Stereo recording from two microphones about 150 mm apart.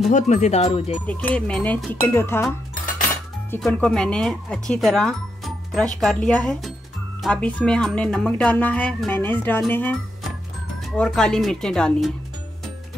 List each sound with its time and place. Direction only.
0.1 s speech: 50° left (ahead or behind)
1.0 s speech: 10° left (ahead or behind)
3.6 s speech: 5° left (ahead or behind)
11.0 s speech: 5° left (ahead or behind)